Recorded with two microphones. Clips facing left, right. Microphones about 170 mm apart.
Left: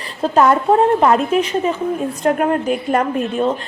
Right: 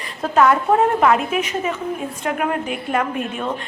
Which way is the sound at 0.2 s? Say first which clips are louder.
Left 2 dB; 30° left (ahead or behind).